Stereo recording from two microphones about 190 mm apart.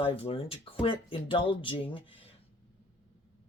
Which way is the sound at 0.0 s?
30° left (ahead or behind).